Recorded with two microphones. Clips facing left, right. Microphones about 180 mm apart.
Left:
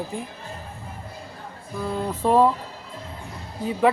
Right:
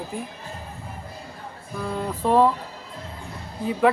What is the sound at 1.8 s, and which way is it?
Music, 5° left (ahead or behind).